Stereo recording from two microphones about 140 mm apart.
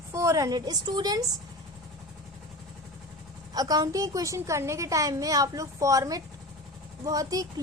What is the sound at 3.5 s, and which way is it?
Speech, 25° right (ahead or behind).